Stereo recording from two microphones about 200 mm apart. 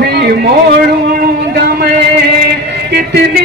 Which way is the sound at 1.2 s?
50° right (ahead or behind).